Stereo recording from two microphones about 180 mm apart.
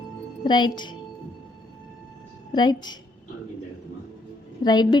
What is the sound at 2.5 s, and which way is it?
Speech, 25° left (ahead or behind).